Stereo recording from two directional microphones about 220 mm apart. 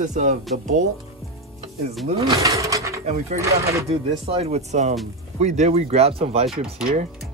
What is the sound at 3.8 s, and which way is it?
Speech, 25° right (ahead or behind).